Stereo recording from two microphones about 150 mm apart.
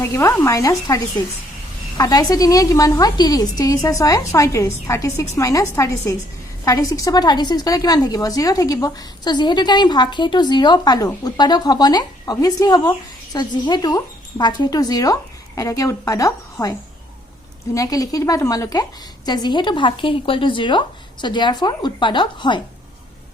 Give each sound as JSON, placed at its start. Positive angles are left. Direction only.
{"t": 0.0, "sound": "a woman's voice", "side_deg": 20}
{"t": 17.7, "sound": "a woman's voice", "side_deg": 25}